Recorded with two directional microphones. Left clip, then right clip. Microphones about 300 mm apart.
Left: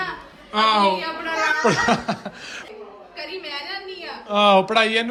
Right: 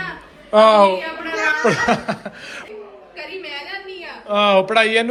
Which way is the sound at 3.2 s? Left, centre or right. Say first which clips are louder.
Right 1 dB; left.